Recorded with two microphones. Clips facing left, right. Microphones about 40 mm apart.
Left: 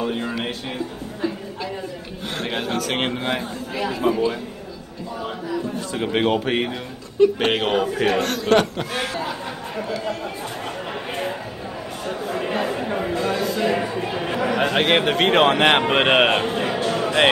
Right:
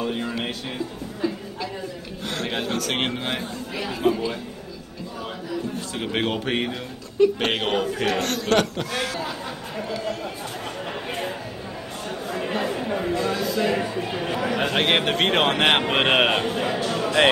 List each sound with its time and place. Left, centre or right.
0.0 s speech: centre
2.3 s a man's voice: centre
5.9 s a man's voice: centre
8.9 s a man's voice: left
9.8 s speech: centre
12.1 s chatter: centre
13.6 s a man's voice: centre
16.6 s a sound: left